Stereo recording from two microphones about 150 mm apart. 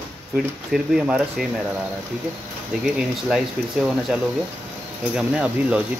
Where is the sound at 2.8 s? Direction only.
5° right (ahead or behind).